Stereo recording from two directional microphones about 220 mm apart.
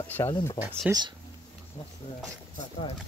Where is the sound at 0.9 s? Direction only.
5° right (ahead or behind).